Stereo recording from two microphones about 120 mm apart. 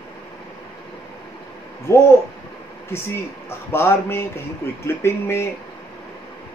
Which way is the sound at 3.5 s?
20° left (ahead or behind).